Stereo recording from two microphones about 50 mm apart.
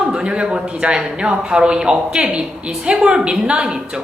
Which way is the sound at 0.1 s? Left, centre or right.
Centre.